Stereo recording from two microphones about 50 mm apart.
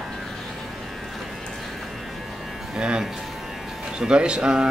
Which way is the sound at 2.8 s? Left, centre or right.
Centre.